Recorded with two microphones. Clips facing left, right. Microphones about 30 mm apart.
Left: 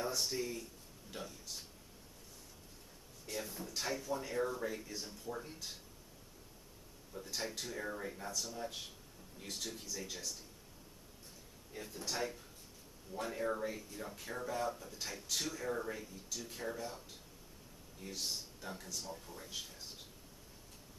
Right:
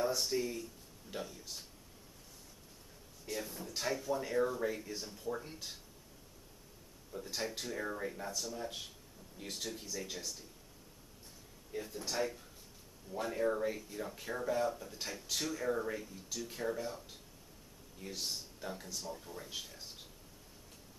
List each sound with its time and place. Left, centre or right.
0.0 s a sound: centre
1.1 s speech: centre
3.3 s speech: centre
7.3 s speech: centre
11.7 s speech: centre
18.0 s speech: centre